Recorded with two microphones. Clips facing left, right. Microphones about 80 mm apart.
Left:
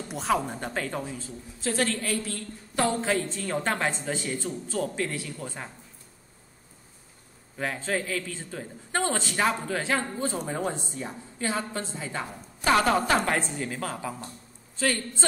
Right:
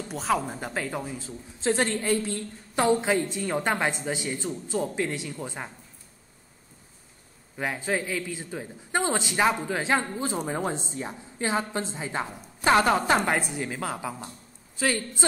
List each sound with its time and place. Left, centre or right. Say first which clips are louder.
0.1 s a woman's voice: even; centre
7.5 s a woman's voice: right 1 dB; centre